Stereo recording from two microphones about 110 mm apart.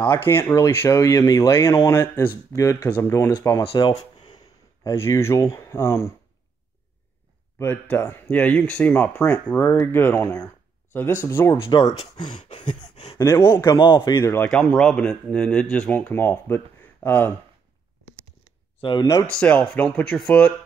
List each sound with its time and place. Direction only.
0.0 s speech: 20° left (ahead or behind); by 4.4 s 40° left (ahead or behind)
4.9 s speech: 25° left (ahead or behind)
7.5 s speech: 20° left (ahead or behind)
11.8 s speech: 70° left (ahead or behind)
12.5 s speech: 50° left (ahead or behind)
12.9 s a sound: 90° left
13.4 s speech: 40° left (ahead or behind)
14.2 s speech: 25° left (ahead or behind)
14.5 s speech: 5° left (ahead or behind)
18.8 s speech: 50° left (ahead or behind)
19.2 s speech: 15° left (ahead or behind)